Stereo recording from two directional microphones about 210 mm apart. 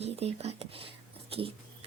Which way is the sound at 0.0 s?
30° right (ahead or behind).